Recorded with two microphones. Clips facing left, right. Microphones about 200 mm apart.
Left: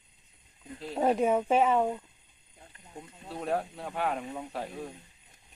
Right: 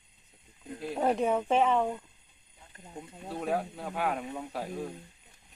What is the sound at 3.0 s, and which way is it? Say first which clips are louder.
Speech: right 2 dB; 5° right (ahead or behind).